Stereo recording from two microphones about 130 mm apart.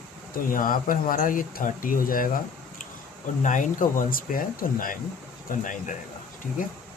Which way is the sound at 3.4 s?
90° left.